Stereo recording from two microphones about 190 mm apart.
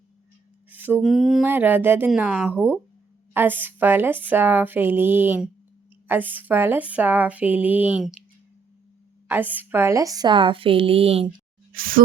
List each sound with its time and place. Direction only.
0.7 s speech: 10° right (ahead or behind)
9.2 s a woman's voice: 10° right (ahead or behind); by 11.3 s 30° right (ahead or behind)
11.7 s speech: 50° right (ahead or behind)